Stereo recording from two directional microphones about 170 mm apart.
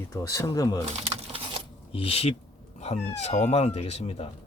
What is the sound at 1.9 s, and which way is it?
Speech, 35° left (ahead or behind).